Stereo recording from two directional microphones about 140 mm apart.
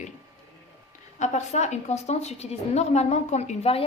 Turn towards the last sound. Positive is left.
turn(degrees=45)  # may be behind; listen again after turning